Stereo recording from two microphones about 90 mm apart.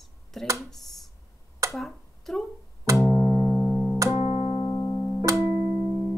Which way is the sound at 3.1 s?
45° left (ahead or behind).